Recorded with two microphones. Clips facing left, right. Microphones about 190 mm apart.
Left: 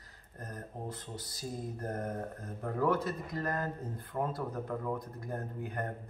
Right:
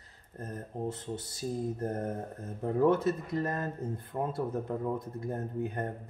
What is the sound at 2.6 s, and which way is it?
Speech, 25° right (ahead or behind).